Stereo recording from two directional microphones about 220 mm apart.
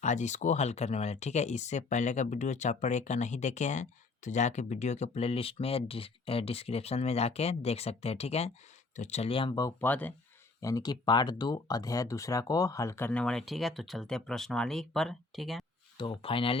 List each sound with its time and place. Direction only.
0.0 s speech: 35° left (ahead or behind); by 15.6 s centre (ahead or behind)
16.0 s speech: 25° left (ahead or behind)